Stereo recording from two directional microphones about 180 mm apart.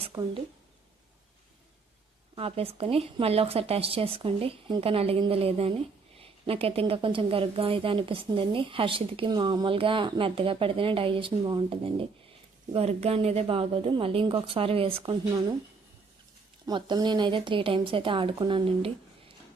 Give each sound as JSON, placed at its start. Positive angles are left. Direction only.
{"t": 0.1, "sound": "speech", "side_deg": -20}
{"t": 2.3, "sound": "speech", "side_deg": -30}
{"t": 16.6, "sound": "speech", "side_deg": -25}